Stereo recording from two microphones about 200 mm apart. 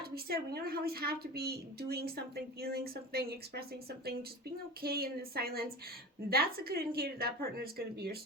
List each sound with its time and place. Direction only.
0.0 s speech: 50° right (ahead or behind)
4.8 s speech: 50° right (ahead or behind)